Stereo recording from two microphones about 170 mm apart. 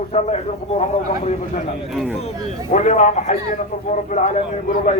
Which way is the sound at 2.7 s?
45° left (ahead or behind).